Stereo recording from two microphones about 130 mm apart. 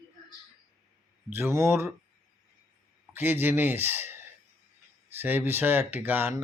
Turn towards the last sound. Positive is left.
turn(degrees=-15)  # may be behind; listen again after turning